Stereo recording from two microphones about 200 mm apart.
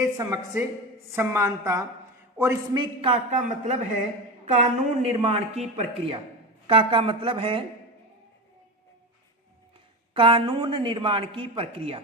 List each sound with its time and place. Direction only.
0.0 s a woman's voice: 15° right (ahead or behind)
10.2 s speech: 25° right (ahead or behind)